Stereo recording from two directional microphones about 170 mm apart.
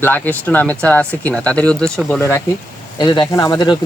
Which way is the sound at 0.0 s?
10° left (ahead or behind).